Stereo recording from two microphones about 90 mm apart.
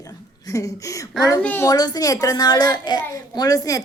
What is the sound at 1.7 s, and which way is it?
A child's voice, 45° left (ahead or behind).